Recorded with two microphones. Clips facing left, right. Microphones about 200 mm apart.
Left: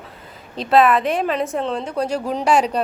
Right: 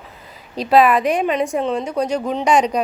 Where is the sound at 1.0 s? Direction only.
Centre (ahead or behind).